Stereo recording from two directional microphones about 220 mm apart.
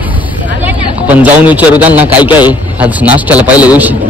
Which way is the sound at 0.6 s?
5° right (ahead or behind).